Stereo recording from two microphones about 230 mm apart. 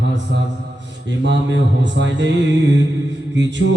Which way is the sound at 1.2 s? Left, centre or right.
Right.